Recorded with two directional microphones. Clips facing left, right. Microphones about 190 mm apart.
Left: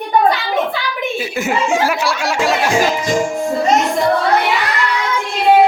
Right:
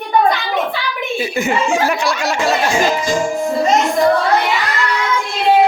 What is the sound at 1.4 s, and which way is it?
Speech, 5° left (ahead or behind).